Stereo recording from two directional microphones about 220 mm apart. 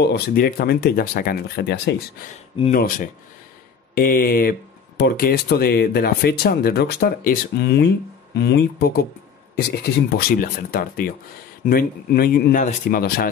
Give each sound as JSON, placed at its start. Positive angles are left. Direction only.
{"t": 0.0, "sound": "speech", "side_deg": 45}